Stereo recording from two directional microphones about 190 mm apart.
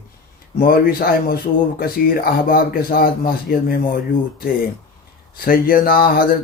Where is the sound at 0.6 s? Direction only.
50° left (ahead or behind).